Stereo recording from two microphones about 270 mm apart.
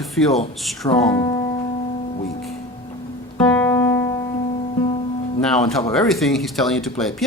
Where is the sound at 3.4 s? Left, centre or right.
Centre.